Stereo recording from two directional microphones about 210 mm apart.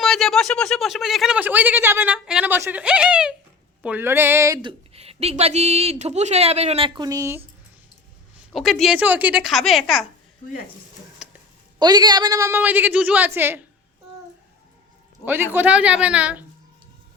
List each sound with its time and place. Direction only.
0.0 s speech: centre (ahead or behind)
8.5 s speech: centre (ahead or behind)
11.2 s a sound: centre (ahead or behind)
11.8 s a woman's voice: 20° right (ahead or behind)
15.2 s a woman's voice: 10° right (ahead or behind)